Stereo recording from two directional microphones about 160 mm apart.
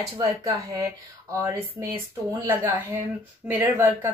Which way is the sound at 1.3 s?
20° right (ahead or behind).